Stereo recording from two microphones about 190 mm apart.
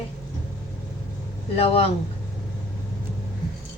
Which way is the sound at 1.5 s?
30° left (ahead or behind).